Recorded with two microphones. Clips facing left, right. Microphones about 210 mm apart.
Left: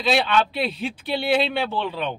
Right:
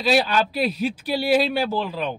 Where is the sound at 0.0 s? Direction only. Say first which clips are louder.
Right 1 dB; 5° right (ahead or behind).